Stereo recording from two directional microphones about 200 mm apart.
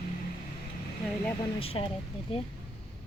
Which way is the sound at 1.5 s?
30° left (ahead or behind).